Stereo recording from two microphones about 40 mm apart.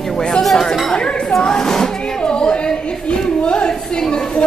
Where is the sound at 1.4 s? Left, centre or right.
Centre.